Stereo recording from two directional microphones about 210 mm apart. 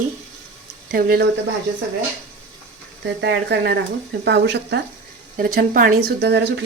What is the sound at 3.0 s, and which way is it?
Speech, 55° right (ahead or behind).